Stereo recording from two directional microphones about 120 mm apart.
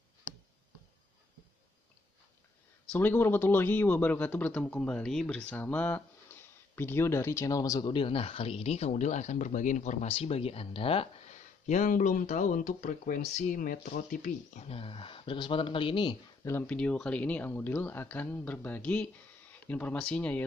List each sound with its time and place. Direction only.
2.9 s speech: 15° left (ahead or behind)
7.9 s speech: 50° left (ahead or behind); by 10.0 s 85° left
10.0 s speech: 55° left (ahead or behind)
11.2 s speech: 90° left; by 16.2 s 45° left (ahead or behind)
16.4 s speech: 20° left (ahead or behind)
16.7 s speech: 10° left (ahead or behind)